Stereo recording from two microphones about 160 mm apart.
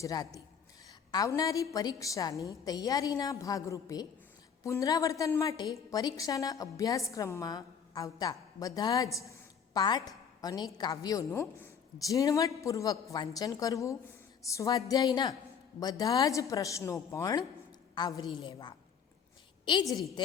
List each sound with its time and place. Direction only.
0.0 s a woman's voice: 20° left (ahead or behind)
20.2 s a woman's voice: 30° left (ahead or behind)